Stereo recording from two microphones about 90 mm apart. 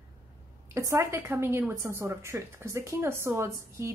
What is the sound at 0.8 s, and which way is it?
A woman's voice, 40° right (ahead or behind).